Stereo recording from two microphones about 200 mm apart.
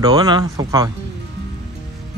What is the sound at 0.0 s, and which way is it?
Speech, 20° right (ahead or behind).